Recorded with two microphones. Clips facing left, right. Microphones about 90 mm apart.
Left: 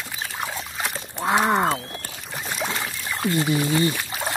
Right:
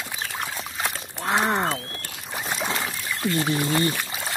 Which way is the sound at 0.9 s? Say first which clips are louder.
Left 4 dB; 5° left (ahead or behind).